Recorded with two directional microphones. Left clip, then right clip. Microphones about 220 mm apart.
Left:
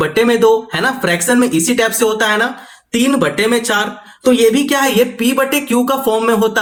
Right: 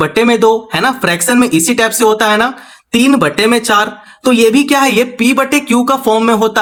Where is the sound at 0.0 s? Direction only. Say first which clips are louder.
Right 2 dB; 30° right (ahead or behind).